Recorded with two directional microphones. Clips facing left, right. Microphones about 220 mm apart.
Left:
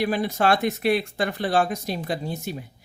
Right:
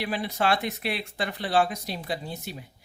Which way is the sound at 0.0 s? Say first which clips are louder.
Left 5 dB; 45° left (ahead or behind).